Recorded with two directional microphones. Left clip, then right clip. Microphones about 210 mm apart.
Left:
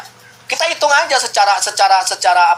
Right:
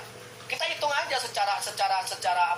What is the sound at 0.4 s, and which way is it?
Speech, 45° left (ahead or behind).